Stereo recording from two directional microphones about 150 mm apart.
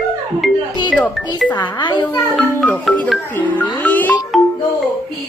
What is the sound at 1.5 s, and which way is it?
Music, 30° left (ahead or behind).